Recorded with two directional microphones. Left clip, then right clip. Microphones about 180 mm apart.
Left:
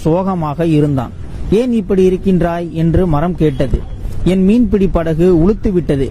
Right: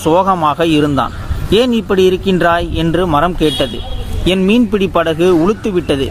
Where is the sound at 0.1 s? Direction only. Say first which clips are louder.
Right 6 dB; 35° left (ahead or behind).